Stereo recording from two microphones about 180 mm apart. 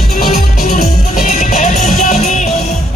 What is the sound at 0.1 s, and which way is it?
Music, 55° left (ahead or behind).